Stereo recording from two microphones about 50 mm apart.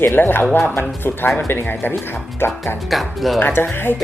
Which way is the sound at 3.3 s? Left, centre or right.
Left.